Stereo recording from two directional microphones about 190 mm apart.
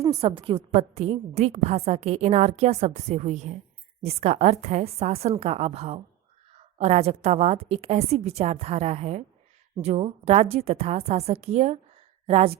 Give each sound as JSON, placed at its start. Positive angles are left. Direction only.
{"t": 0.1, "sound": "a woman's voice", "side_deg": -30}